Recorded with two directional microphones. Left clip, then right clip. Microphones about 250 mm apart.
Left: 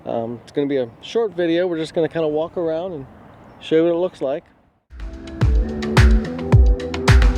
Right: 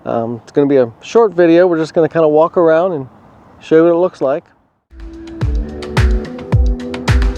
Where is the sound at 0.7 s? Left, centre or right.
Right.